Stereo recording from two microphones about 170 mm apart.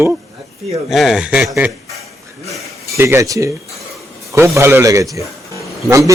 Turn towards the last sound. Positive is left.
turn(degrees=-20)  # may be behind; listen again after turning